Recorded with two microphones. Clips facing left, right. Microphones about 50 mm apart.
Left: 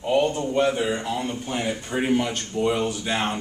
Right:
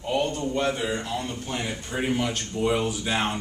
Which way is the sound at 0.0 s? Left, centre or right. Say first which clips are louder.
Left 4 dB; centre.